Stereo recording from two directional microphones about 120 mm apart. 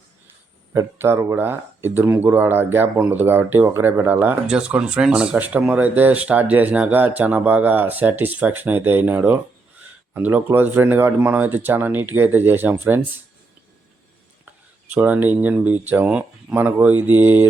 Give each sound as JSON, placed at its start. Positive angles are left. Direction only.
{"t": 0.7, "sound": "speech", "side_deg": -20}
{"t": 14.4, "sound": "speech", "side_deg": -15}